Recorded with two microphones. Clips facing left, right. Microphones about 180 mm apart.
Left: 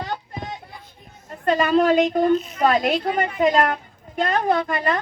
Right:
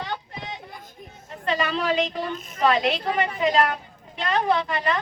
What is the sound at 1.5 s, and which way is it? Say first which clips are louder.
A woman's voice: left 7 dB; 50° left (ahead or behind).